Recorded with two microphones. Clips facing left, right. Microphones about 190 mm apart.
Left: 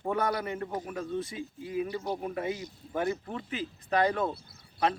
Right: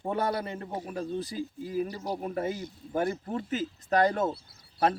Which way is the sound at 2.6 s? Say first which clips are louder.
Right 3 dB; 50° right (ahead or behind).